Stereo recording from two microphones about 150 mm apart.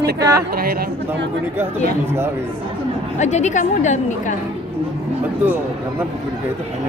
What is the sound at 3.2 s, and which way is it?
Speech, 50° left (ahead or behind).